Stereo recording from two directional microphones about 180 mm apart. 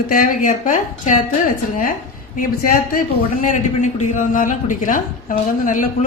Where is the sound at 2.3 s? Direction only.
55° left (ahead or behind).